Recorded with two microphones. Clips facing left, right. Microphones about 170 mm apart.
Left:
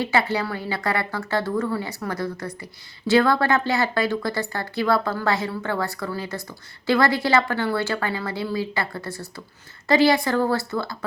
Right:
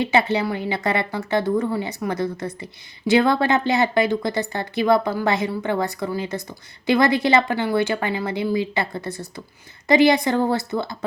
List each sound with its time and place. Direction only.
0.0 s a woman's voice: 20° right (ahead or behind)